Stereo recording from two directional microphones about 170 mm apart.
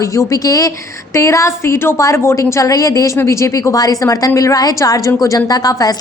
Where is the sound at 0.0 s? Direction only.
20° left (ahead or behind).